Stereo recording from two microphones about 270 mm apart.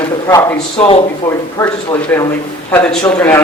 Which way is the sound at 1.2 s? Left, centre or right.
Centre.